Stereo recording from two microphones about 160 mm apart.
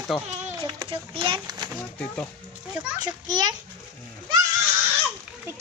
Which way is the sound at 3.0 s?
25° right (ahead or behind).